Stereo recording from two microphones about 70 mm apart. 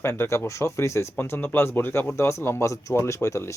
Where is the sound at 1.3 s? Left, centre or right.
Left.